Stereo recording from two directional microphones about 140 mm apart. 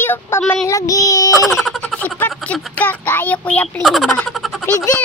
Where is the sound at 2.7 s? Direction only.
10° left (ahead or behind).